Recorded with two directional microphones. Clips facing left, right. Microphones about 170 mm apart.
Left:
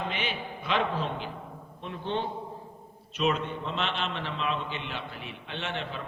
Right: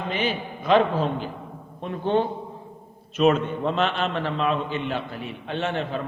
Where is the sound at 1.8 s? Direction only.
45° right (ahead or behind).